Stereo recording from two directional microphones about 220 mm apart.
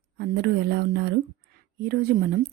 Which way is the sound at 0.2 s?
50° right (ahead or behind).